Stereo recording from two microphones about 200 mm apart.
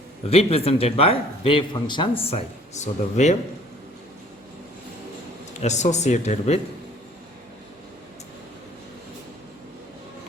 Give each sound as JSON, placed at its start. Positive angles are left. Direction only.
{"t": 0.3, "sound": "speech", "side_deg": 30}
{"t": 5.6, "sound": "speech", "side_deg": 35}